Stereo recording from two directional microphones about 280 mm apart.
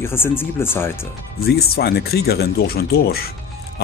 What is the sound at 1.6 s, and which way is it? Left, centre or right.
Speech, left.